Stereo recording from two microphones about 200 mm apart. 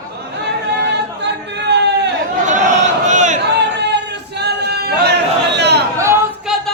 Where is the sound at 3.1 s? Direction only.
35° right (ahead or behind).